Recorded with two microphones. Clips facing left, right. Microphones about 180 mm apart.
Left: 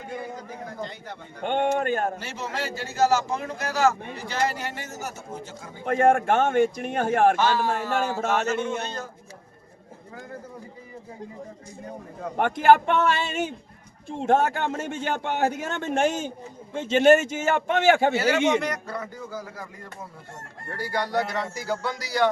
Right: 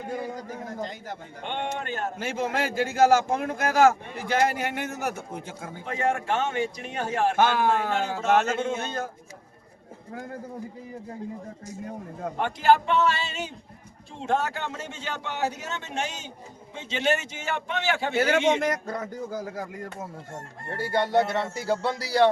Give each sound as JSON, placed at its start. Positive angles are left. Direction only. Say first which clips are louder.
{"t": 0.1, "sound": "speech", "louder": "right 2 dB", "side_deg": -40}
{"t": 1.4, "sound": "speech", "louder": "left 8 dB", "side_deg": 45}
{"t": 2.1, "sound": "a man's voice", "louder": "right 4 dB", "side_deg": -50}
{"t": 5.8, "sound": "speech", "louder": "left 7 dB", "side_deg": 55}
{"t": 7.3, "sound": "speech", "louder": "right 1 dB", "side_deg": -55}
{"t": 7.9, "sound": "speech", "louder": "left 3 dB", "side_deg": 50}
{"t": 8.3, "sound": "a man's voice", "louder": "right 6 dB", "side_deg": -55}
{"t": 12.4, "sound": "speech", "louder": "left 3 dB", "side_deg": 55}
{"t": 18.1, "sound": "a man's voice", "louder": "left 1 dB", "side_deg": -50}
{"t": 20.7, "sound": "speech", "louder": "right 2 dB", "side_deg": -25}